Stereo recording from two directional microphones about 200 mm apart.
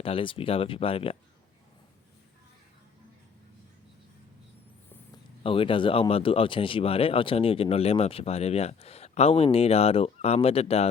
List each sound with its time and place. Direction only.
0.0 s speech: 25° left (ahead or behind)
5.4 s speech: 25° left (ahead or behind)